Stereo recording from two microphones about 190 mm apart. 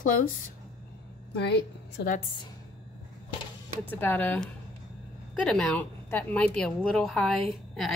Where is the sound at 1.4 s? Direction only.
65° left (ahead or behind).